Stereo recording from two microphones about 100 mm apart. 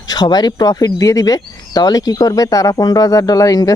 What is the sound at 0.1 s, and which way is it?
Speech, 45° left (ahead or behind).